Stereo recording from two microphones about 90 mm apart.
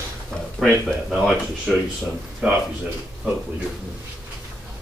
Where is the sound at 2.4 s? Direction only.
15° right (ahead or behind).